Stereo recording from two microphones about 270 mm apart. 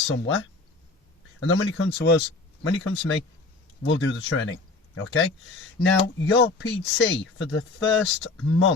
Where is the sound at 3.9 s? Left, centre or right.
Left.